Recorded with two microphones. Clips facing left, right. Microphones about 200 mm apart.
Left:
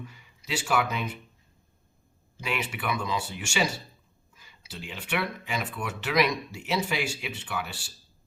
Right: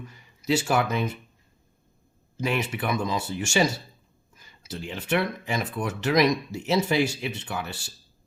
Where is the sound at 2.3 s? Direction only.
40° right (ahead or behind).